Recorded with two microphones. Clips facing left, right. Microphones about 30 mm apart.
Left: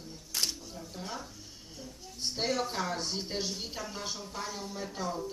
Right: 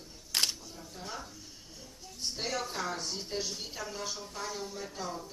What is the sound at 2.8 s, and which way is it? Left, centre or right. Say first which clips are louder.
A woman's voice: left 2 dB; centre.